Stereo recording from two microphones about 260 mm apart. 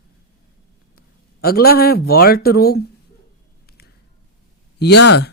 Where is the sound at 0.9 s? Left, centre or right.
Left.